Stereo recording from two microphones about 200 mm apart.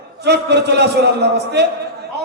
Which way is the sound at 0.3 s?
55° right (ahead or behind).